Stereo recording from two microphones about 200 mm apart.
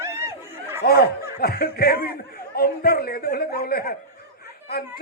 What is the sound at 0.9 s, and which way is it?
A man's voice, 50° left (ahead or behind).